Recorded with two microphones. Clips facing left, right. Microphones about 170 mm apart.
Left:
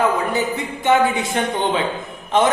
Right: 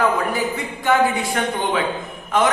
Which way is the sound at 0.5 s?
20° left (ahead or behind).